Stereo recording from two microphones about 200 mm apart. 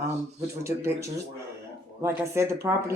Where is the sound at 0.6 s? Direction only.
15° right (ahead or behind).